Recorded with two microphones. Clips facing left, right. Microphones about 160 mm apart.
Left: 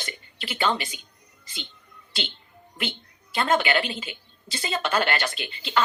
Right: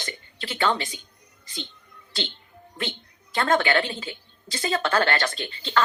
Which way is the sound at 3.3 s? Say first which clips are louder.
Right 1 dB; 15° left (ahead or behind).